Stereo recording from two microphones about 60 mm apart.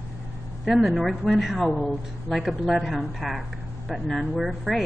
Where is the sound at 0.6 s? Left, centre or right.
Centre.